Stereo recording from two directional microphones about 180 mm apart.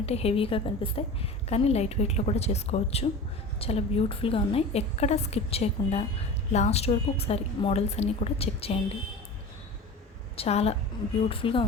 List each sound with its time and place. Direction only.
0.0 s a woman's voice: 35° left (ahead or behind)
10.3 s a woman's voice: 35° left (ahead or behind)